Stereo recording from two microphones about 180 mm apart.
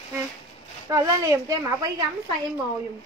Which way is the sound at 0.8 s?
20° right (ahead or behind).